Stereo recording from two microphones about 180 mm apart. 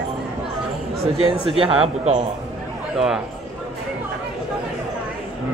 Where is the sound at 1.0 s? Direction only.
35° right (ahead or behind).